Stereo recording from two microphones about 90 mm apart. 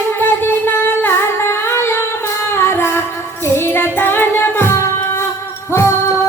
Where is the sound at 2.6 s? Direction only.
25° left (ahead or behind).